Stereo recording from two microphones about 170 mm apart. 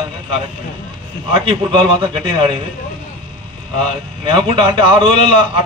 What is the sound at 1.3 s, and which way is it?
A man's voice, 30° right (ahead or behind).